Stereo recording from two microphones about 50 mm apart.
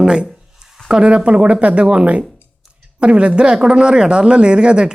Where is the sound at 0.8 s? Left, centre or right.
Centre.